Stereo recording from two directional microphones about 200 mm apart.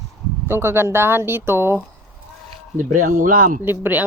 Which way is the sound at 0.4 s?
10° right (ahead or behind).